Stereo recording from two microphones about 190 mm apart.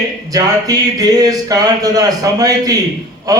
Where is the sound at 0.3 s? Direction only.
20° right (ahead or behind).